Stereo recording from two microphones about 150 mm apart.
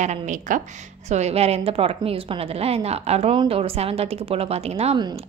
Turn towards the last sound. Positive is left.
turn(degrees=-45)  # may be behind; listen again after turning